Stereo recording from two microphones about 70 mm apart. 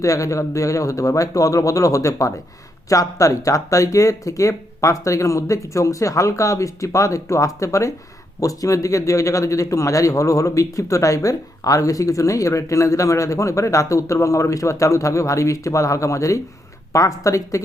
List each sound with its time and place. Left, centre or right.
0.0 s a man's voice: left